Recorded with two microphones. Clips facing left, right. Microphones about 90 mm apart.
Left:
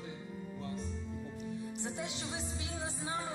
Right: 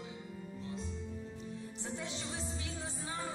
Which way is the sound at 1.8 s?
15° left (ahead or behind).